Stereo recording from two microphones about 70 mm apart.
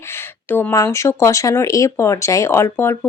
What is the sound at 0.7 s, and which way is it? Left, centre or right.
Speech, left.